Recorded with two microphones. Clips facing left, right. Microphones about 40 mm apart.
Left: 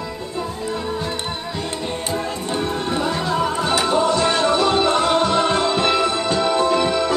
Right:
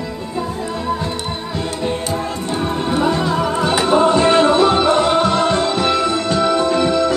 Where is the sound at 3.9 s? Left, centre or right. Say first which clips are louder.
Right 8 dB; right; by 7.1 s centre.